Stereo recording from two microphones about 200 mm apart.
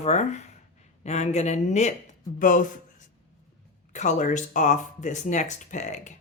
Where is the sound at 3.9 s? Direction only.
35° left (ahead or behind).